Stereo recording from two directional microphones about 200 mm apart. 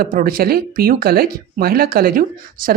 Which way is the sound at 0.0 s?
45° right (ahead or behind).